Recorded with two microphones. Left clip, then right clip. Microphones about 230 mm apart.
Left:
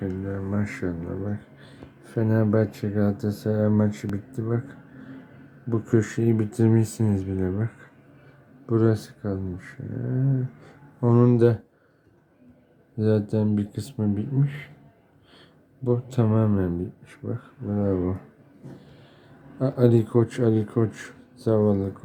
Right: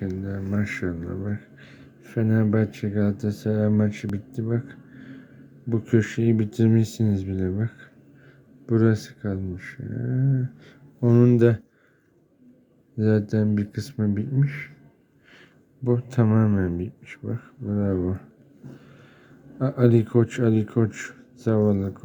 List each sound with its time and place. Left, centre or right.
0.0 s a sound: centre
1.2 s speech: centre
5.6 s speech: centre
13.0 s speech: centre
15.8 s speech: centre
19.5 s speech: centre